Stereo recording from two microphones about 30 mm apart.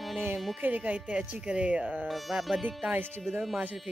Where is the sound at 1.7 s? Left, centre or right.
Right.